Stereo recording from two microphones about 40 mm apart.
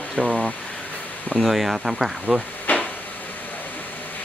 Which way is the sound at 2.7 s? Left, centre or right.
Left.